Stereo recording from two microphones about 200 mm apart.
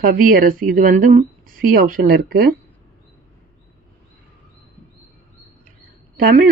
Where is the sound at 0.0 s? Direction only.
45° right (ahead or behind).